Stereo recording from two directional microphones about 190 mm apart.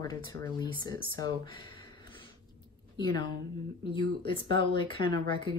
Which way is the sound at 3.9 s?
25° left (ahead or behind).